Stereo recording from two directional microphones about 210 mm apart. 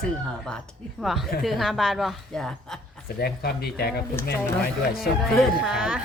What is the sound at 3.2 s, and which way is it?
Speech, 50° left (ahead or behind).